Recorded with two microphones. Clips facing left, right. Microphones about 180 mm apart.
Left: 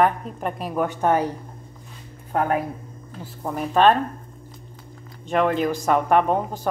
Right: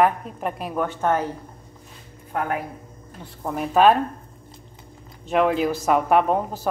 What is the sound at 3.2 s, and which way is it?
Speech, centre (ahead or behind).